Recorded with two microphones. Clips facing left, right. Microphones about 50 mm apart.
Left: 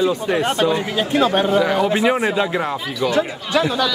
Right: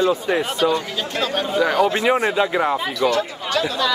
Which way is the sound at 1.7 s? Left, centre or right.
Centre.